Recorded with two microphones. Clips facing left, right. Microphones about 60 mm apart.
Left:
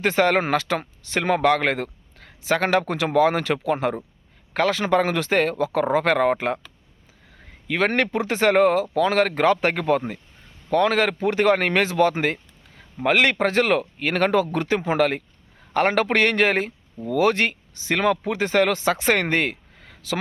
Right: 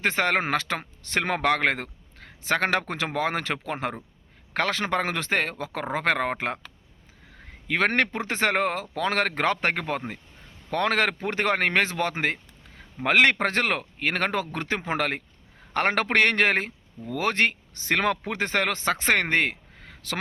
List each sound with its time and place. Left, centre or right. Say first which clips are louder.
0.0 s speech: left 5 dB; right
1.0 s speech: left 4 dB; right
7.7 s speech: left 2 dB; right
10.7 s a man's voice: left 4 dB; right
11.2 s speech: left 6 dB; right
17.7 s a man's voice: left 4 dB; right